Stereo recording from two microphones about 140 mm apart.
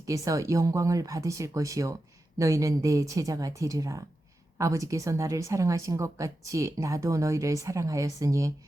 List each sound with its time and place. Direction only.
0.0 s speech: 25° right (ahead or behind)